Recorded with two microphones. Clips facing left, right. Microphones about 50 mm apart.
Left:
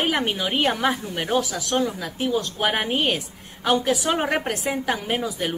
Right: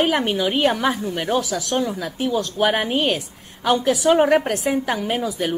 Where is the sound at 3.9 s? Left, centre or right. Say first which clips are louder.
Right 7 dB; centre.